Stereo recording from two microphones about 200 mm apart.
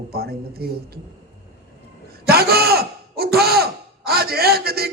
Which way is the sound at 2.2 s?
50° right (ahead or behind).